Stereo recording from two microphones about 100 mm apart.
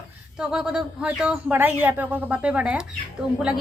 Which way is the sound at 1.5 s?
20° right (ahead or behind).